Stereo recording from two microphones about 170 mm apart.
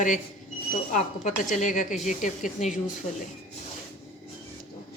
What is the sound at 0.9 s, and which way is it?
A woman's voice, 50° left (ahead or behind).